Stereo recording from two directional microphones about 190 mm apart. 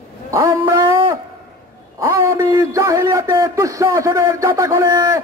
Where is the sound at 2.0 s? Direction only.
15° right (ahead or behind).